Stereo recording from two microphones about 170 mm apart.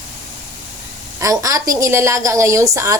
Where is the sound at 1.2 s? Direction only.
20° right (ahead or behind).